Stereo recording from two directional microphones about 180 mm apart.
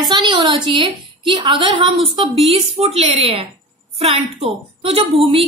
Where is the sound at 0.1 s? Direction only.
25° right (ahead or behind).